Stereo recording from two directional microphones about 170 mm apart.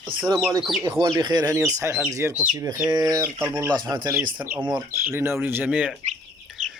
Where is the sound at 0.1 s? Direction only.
30° right (ahead or behind).